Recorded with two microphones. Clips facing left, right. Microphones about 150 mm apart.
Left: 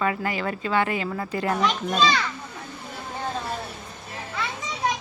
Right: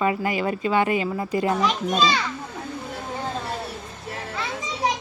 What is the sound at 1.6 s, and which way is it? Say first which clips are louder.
Speech: right 1 dB; centre (ahead or behind).